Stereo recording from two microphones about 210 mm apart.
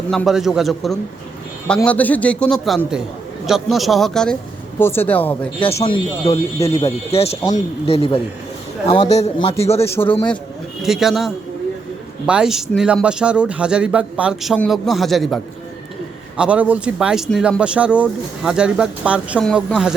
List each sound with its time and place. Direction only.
0.1 s speech: centre (ahead or behind)
5.5 s speech: 30° left (ahead or behind)
6.6 s speech: 15° left (ahead or behind)
6.8 s a man's voice: 30° left (ahead or behind)
9.8 s speech: 10° left (ahead or behind)
10.8 s speech: centre (ahead or behind)
16.4 s speech: 5° right (ahead or behind)